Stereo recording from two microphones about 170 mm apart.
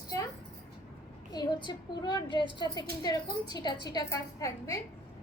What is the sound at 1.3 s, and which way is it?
A woman's voice, 25° left (ahead or behind).